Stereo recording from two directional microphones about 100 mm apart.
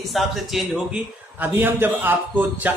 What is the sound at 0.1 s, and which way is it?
Speech, centre (ahead or behind).